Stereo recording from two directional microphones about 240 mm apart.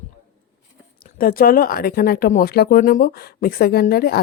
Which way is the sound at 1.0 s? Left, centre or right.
Left.